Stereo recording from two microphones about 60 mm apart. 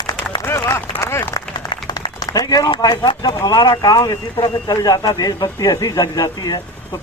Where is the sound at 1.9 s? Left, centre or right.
Left.